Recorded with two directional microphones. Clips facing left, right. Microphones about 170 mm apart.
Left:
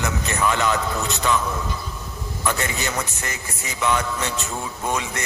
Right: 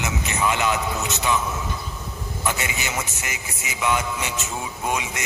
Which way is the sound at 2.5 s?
15° right (ahead or behind).